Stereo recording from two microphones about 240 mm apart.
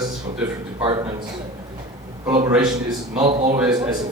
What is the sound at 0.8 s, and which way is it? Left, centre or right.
Speech, right.